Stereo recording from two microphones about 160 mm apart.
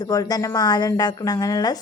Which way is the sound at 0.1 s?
25° left (ahead or behind).